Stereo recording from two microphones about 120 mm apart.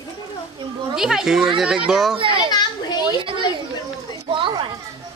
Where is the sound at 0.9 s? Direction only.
5° right (ahead or behind).